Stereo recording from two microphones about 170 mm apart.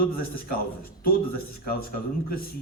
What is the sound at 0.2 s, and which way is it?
Speech, 60° left (ahead or behind).